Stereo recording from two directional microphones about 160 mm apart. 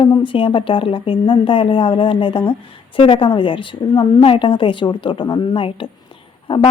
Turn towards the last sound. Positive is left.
turn(degrees=35)  # may be behind; listen again after turning